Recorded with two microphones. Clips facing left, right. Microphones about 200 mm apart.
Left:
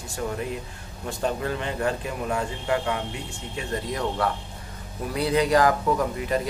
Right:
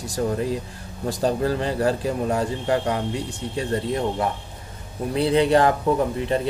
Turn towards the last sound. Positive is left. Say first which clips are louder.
# right 3 dB
turn(degrees=-30)  # may be behind; listen again after turning